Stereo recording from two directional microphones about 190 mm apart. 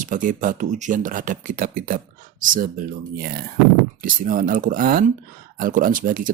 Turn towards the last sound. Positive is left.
turn(degrees=-45)  # may be behind; listen again after turning